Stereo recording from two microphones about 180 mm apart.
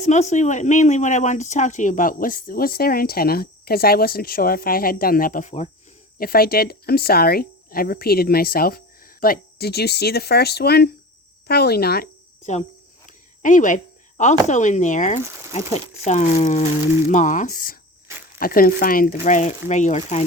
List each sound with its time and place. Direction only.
0.0 s speech: 40° left (ahead or behind)
6.1 s speech: 55° left (ahead or behind)
13.1 s speech: 45° left (ahead or behind)